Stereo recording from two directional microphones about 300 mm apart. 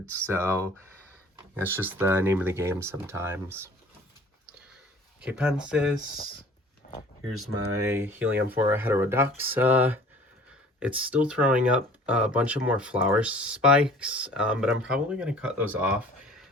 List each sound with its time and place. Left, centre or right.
0.3 s speech: centre
5.2 s speech: centre
6.8 s a sound: left
7.3 s speech: right
7.8 s speech: centre